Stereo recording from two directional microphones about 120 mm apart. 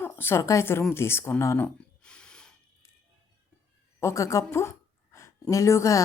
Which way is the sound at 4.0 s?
25° left (ahead or behind).